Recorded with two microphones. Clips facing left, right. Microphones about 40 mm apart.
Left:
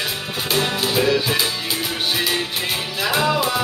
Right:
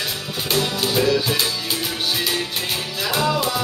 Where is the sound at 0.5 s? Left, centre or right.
Left.